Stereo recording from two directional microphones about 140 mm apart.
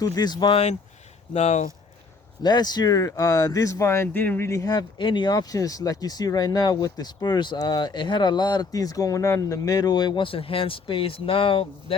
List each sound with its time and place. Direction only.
0.0 s speech: 25° left (ahead or behind)
1.3 s speech: 50° left (ahead or behind)
2.4 s speech: 30° left (ahead or behind)